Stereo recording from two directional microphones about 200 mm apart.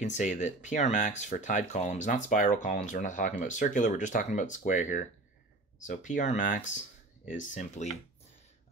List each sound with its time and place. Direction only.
0.0 s speech: 35° left (ahead or behind)